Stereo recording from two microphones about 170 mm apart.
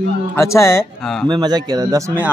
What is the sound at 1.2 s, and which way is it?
Speech, 25° right (ahead or behind).